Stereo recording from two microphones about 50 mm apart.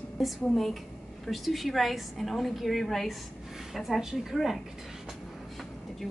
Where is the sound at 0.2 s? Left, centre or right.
Centre.